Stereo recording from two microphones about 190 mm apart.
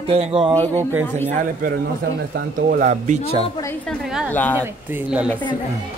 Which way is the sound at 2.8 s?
40° right (ahead or behind).